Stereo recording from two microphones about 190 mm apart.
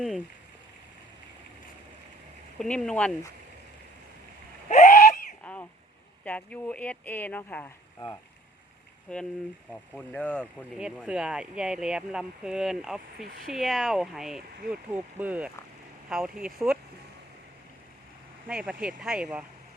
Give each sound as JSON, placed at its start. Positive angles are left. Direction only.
{"t": 2.6, "sound": "speech", "side_deg": 5}
{"t": 4.7, "sound": "a sound", "side_deg": 40}
{"t": 5.4, "sound": "cough", "side_deg": 5}
{"t": 6.2, "sound": "speech", "side_deg": 5}
{"t": 9.1, "sound": "speech", "side_deg": 5}
{"t": 10.8, "sound": "speech", "side_deg": -5}
{"t": 18.4, "sound": "speech", "side_deg": -5}